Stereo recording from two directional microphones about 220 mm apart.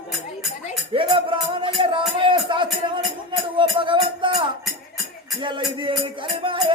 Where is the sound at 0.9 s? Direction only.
25° right (ahead or behind).